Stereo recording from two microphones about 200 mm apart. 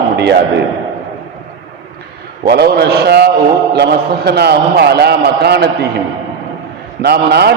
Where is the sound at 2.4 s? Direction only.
55° right (ahead or behind).